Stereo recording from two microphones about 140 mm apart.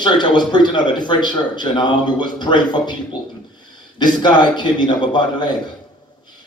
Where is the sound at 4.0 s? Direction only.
30° left (ahead or behind).